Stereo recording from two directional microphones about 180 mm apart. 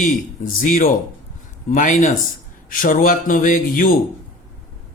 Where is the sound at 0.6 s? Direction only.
45° left (ahead or behind).